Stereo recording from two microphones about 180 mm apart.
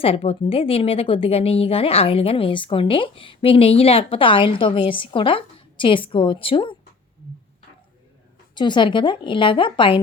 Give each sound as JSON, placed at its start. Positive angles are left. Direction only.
{"t": 0.0, "sound": "a woman's voice", "side_deg": 30}
{"t": 8.5, "sound": "a woman's voice", "side_deg": 25}